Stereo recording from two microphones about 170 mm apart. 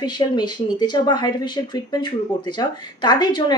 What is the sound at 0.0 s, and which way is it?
A woman's voice, 25° left (ahead or behind).